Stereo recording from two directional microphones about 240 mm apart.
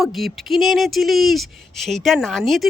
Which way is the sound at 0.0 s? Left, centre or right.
Centre.